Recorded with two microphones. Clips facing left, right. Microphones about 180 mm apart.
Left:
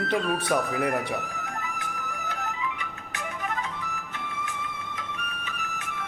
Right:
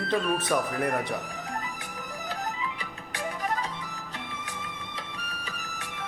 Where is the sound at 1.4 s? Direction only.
30° right (ahead or behind).